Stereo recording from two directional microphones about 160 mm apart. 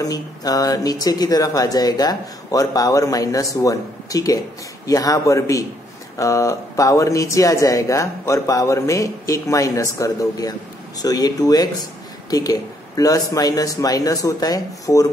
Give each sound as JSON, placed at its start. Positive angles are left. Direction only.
{"t": 0.0, "sound": "speech", "side_deg": 25}